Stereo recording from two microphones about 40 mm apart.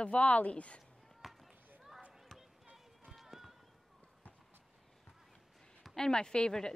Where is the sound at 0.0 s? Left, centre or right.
Left.